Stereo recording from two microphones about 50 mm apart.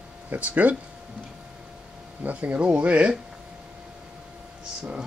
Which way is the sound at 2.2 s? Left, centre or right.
Right.